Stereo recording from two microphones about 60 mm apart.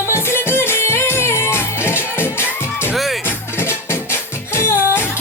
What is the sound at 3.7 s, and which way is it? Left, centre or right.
Music, left.